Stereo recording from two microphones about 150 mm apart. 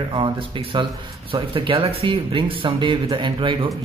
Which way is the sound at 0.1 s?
35° right (ahead or behind).